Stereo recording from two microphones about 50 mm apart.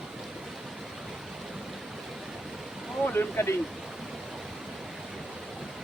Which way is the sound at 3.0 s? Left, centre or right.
Left.